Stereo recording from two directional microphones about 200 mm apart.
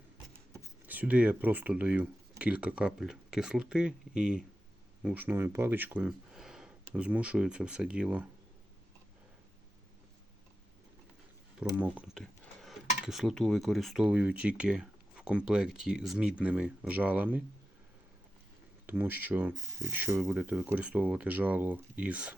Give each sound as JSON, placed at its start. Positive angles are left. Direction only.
{"t": 0.9, "sound": "speech", "side_deg": -10}
{"t": 11.7, "sound": "speech", "side_deg": -5}
{"t": 18.9, "sound": "speech", "side_deg": -10}